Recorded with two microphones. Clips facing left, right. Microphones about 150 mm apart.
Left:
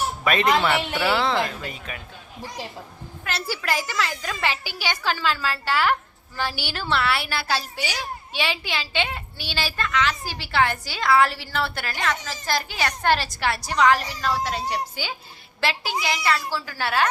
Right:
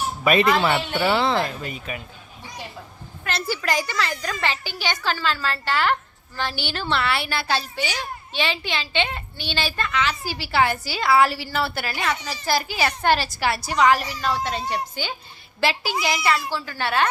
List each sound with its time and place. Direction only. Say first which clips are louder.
0.3 s speech: right 2 dB; 10° right (ahead or behind)
0.9 s speech: right 2 dB; 20° right (ahead or behind)
1.2 s a child's voice: right 1 dB; centre (ahead or behind)
3.2 s a child's voice: right 2 dB; 5° left (ahead or behind)